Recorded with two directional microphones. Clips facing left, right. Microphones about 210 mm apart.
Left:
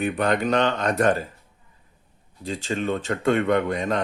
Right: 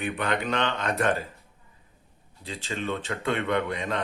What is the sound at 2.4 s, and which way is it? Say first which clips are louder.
Speech: left 6 dB; 45° left (ahead or behind).